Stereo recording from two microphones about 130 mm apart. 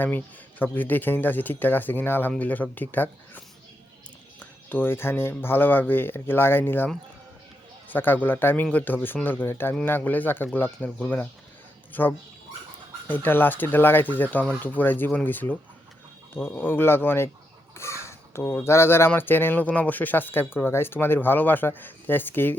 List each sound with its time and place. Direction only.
0.6 s speech: 15° left (ahead or behind)